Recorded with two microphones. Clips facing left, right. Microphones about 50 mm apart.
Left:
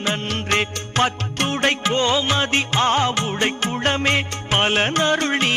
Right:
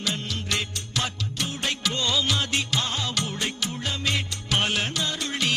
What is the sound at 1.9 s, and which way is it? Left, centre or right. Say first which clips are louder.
Music: left 3 dB; left.